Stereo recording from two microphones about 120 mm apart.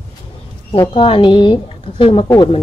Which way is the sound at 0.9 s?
45° left (ahead or behind).